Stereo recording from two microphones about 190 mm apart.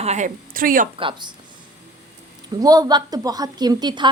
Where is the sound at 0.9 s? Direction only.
25° right (ahead or behind).